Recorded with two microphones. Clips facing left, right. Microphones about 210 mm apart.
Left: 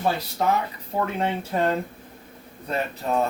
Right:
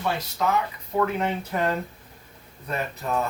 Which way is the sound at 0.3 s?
30° left (ahead or behind).